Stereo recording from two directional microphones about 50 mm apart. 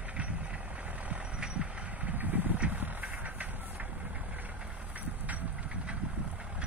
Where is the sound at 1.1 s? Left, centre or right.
Centre.